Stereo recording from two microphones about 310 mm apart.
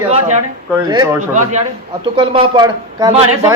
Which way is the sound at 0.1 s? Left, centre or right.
Right.